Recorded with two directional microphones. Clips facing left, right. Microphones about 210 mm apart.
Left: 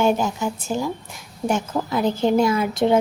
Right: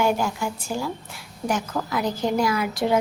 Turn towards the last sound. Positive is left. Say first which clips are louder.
# left 4 dB
turn(degrees=25)  # may be behind; listen again after turning